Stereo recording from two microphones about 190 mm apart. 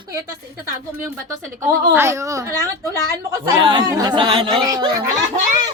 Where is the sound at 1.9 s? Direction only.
15° right (ahead or behind).